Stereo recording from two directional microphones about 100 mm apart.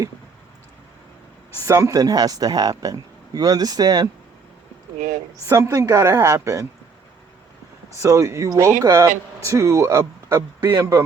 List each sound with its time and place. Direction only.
1.6 s speech: 30° right (ahead or behind)
5.5 s speech: 30° right (ahead or behind)
7.9 s speech: 30° right (ahead or behind)
10.7 s speech: 40° right (ahead or behind)